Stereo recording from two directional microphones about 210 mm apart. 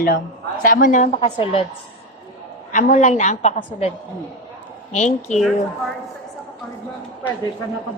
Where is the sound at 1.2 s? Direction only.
25° left (ahead or behind).